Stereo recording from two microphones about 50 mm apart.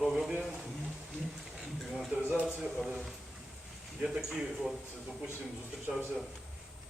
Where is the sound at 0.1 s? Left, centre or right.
Centre.